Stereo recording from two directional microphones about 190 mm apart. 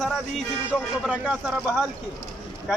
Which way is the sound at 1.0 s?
Centre (ahead or behind).